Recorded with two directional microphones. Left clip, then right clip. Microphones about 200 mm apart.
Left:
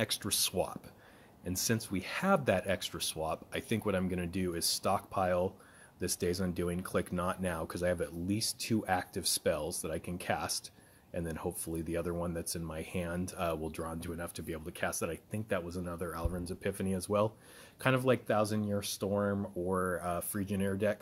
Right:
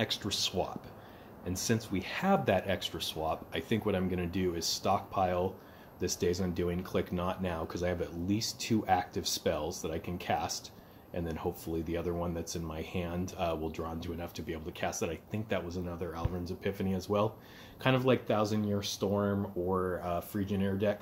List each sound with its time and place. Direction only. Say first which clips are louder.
0.0 s speech: right 1 dB; 45° left (ahead or behind)